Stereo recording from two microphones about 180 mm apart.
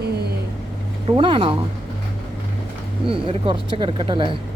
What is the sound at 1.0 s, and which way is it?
Speech, 30° right (ahead or behind).